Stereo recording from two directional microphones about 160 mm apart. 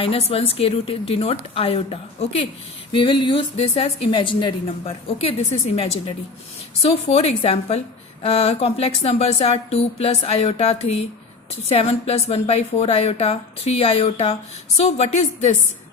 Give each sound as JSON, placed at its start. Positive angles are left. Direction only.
{"t": 0.0, "sound": "a woman's voice", "side_deg": 35}